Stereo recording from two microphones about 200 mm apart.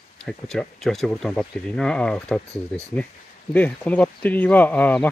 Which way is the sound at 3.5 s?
10° left (ahead or behind).